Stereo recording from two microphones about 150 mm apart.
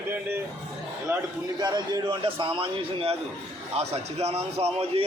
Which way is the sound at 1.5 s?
25° right (ahead or behind).